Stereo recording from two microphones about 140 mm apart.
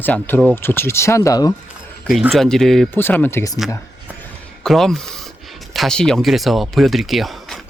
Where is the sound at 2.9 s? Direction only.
15° left (ahead or behind).